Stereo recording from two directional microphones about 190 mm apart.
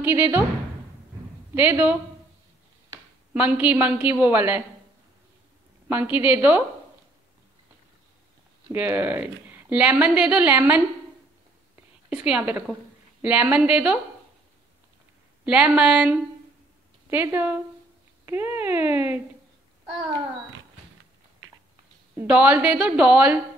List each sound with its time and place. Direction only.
0.0 s a woman's voice: 10° right (ahead or behind)
1.5 s a woman's voice: 10° right (ahead or behind)
3.3 s a woman's voice: 10° right (ahead or behind)
5.9 s a woman's voice: 10° right (ahead or behind)
8.7 s a woman's voice: 10° right (ahead or behind)
11.7 s a sound: 5° right (ahead or behind)
13.2 s a woman's voice: 5° right (ahead or behind)
15.4 s a woman's voice: 5° right (ahead or behind)
18.2 s a sound: 10° right (ahead or behind)
22.1 s a woman's voice: 10° right (ahead or behind)